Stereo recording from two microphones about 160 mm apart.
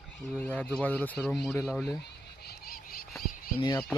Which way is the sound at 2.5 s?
65° left (ahead or behind).